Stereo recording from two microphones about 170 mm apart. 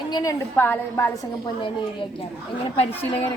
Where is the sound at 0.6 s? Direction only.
15° left (ahead or behind).